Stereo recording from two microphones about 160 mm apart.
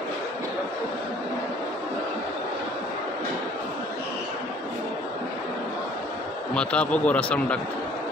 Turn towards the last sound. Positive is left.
turn(degrees=10)  # may be behind; listen again after turning